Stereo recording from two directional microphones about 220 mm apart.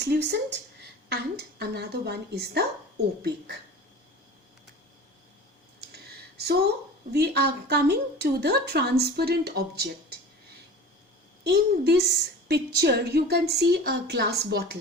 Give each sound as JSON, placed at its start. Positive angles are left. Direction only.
{"t": 0.0, "sound": "a woman's voice", "side_deg": -50}
{"t": 5.8, "sound": "a sound", "side_deg": -45}
{"t": 7.1, "sound": "a woman's voice", "side_deg": -45}
{"t": 11.4, "sound": "a woman's voice", "side_deg": -45}